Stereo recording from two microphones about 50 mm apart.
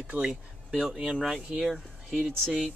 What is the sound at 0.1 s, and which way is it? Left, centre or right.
Speech, right.